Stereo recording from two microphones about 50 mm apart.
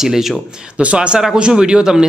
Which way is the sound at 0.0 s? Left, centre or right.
Centre.